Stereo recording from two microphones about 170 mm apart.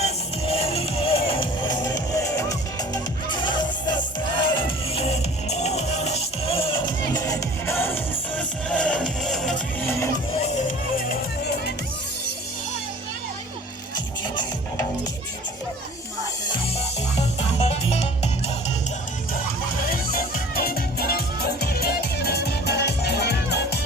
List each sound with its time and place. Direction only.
0.0 s music: 35° left (ahead or behind); by 9.6 s centre (ahead or behind)
13.9 s music: 25° left (ahead or behind)
17.2 s music: 40° left (ahead or behind)
19.9 s music: 60° left (ahead or behind)